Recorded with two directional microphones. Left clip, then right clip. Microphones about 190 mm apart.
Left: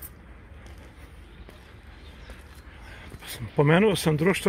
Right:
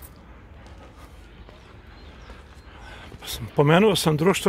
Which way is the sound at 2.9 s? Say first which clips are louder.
Right 5 dB; 10° right (ahead or behind).